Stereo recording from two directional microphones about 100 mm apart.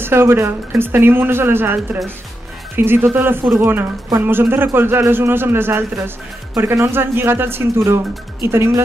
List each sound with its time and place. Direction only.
0.0 s a man's voice: 25° right (ahead or behind)